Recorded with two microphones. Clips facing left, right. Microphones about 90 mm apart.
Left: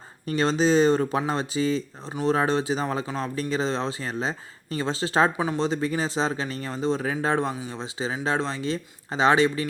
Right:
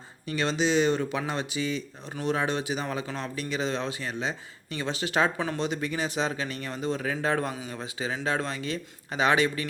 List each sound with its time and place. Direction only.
0.3 s speech: 35° left (ahead or behind)